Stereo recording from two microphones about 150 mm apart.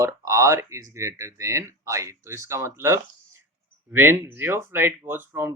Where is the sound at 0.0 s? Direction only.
20° right (ahead or behind).